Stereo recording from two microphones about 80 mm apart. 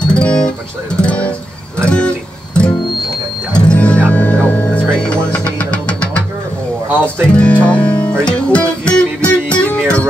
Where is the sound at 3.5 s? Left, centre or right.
Centre.